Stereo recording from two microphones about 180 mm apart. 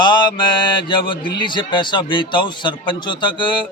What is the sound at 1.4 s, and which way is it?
A man's voice, 25° left (ahead or behind).